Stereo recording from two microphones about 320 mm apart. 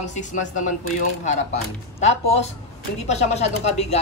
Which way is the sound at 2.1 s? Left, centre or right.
Centre.